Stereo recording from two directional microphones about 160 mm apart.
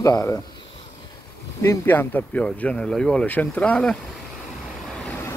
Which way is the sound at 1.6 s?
15° left (ahead or behind).